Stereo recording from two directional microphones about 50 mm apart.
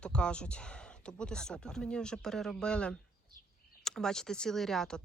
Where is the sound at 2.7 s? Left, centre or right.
Left.